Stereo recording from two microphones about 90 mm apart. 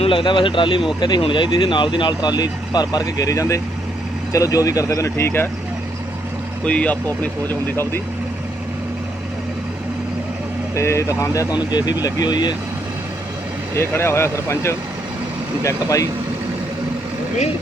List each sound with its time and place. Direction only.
0.0 s speech: 75° left (ahead or behind)
0.9 s speech: 55° left (ahead or behind); by 5.5 s 25° left (ahead or behind)
6.7 s speech: 15° left (ahead or behind)
10.8 s speech: 35° left (ahead or behind)
11.5 s speech: 50° left (ahead or behind)
13.7 s speech: 25° left (ahead or behind)